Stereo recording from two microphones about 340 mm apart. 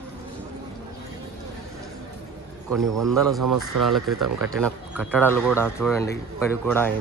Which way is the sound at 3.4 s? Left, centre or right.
Right.